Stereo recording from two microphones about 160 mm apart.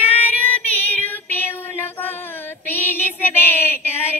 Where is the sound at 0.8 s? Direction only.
10° left (ahead or behind).